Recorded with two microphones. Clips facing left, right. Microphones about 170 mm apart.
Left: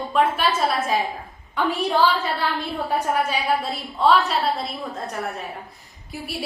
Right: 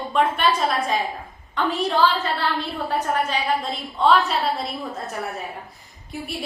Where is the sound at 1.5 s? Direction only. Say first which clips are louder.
Even; 10° left (ahead or behind).